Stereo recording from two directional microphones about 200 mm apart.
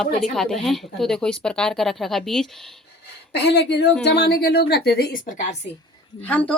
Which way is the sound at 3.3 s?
55° left (ahead or behind).